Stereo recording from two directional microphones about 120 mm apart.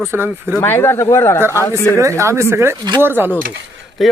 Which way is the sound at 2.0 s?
25° right (ahead or behind).